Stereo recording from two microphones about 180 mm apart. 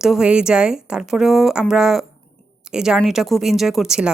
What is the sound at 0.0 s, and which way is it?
Speech, 5° right (ahead or behind).